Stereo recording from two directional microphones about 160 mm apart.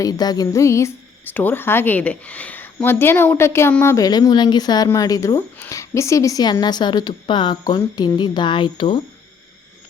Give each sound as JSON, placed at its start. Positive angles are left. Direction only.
{"t": 0.0, "sound": "a woman's voice", "side_deg": 25}